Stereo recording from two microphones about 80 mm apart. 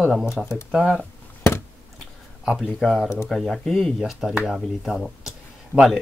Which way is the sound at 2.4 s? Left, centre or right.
Centre.